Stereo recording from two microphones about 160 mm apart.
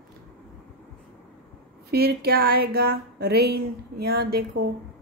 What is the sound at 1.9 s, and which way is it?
Speech, 80° right.